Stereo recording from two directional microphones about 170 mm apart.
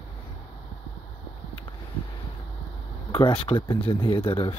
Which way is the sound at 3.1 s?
30° left (ahead or behind).